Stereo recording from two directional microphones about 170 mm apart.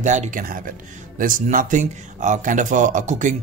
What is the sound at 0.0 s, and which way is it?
Speech, 45° right (ahead or behind).